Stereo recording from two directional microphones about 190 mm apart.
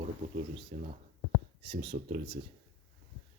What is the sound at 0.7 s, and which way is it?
Speech, 35° right (ahead or behind).